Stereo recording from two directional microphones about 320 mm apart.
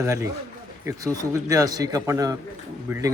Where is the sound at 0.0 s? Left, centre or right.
Centre.